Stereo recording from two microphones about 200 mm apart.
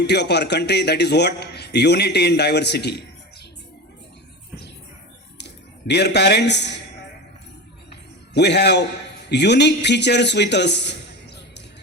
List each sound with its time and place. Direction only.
0.0 s a man's voice: 55° left (ahead or behind)
5.9 s a man's voice: 55° left (ahead or behind)
8.3 s a man's voice: 60° left (ahead or behind)